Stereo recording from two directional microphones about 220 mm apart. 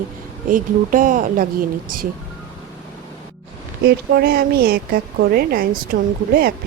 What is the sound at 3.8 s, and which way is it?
A woman's voice, 45° right (ahead or behind).